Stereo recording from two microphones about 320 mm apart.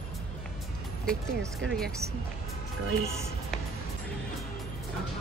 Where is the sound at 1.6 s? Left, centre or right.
Centre.